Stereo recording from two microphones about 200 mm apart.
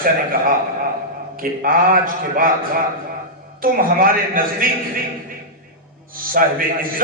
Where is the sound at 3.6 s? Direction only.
45° right (ahead or behind).